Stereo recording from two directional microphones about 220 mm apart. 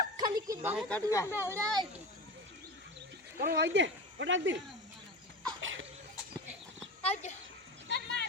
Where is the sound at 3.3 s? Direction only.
40° right (ahead or behind); by 4.6 s 55° right (ahead or behind).